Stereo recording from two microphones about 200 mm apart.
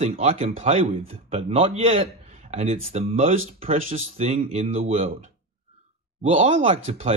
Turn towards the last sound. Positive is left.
turn(degrees=-30)  # may be behind; listen again after turning